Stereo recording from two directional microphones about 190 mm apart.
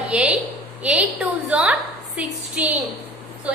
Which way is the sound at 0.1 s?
5° right (ahead or behind).